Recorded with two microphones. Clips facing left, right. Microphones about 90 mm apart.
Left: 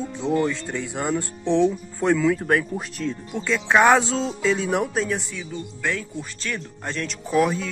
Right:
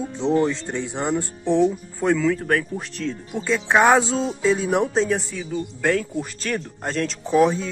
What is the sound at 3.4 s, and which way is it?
Speech, 15° right (ahead or behind).